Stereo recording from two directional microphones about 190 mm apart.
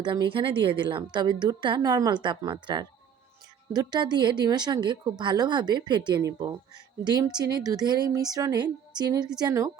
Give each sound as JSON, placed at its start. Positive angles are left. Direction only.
{"t": 0.0, "sound": "a woman's voice", "side_deg": -25}